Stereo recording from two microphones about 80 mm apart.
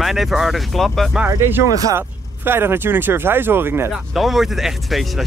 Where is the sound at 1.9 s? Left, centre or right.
Right.